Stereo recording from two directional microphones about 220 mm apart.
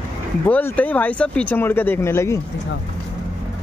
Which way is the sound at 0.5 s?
5° left (ahead or behind).